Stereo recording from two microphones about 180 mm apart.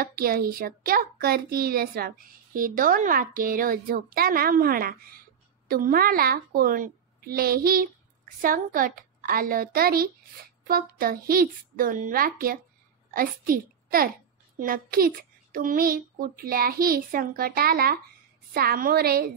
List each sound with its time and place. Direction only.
0.0 s a child's voice: 55° right (ahead or behind)